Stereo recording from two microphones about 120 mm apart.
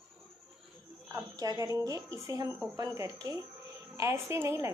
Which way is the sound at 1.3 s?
30° right (ahead or behind).